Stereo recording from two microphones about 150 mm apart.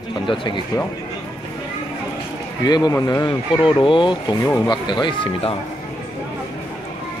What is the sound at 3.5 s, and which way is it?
Speech, 35° left (ahead or behind).